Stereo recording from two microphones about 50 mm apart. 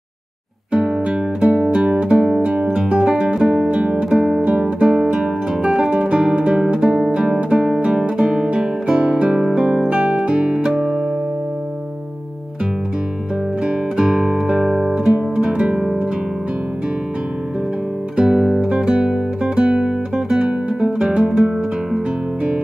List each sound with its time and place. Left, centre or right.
0.7 s music: centre
4.5 s guitar: right
7.3 s music: right
7.8 s guitar: right
9.8 s music: right
13.7 s guitar: centre
15.3 s music: centre
18.1 s music: centre